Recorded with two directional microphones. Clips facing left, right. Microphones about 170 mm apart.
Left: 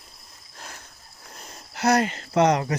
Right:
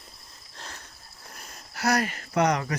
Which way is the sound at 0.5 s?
10° left (ahead or behind).